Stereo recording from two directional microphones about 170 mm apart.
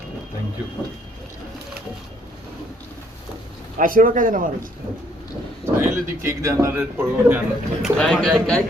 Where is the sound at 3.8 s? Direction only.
55° right (ahead or behind).